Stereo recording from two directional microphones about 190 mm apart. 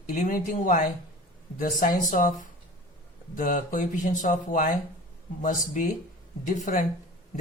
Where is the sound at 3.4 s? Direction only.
40° left (ahead or behind).